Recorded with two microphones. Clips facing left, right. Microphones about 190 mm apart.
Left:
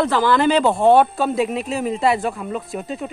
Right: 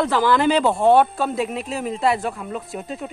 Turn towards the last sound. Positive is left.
turn(degrees=0)  # may be behind; listen again after turning